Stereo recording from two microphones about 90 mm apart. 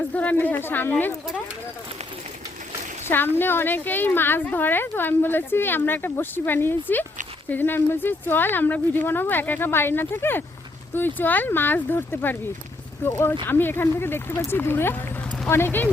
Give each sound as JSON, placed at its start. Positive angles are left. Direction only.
{"t": 0.1, "sound": "a woman's voice", "side_deg": 15}
{"t": 3.1, "sound": "a woman's voice", "side_deg": 25}